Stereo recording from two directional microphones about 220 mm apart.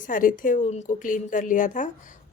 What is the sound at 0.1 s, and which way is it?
A woman's voice, 35° left (ahead or behind).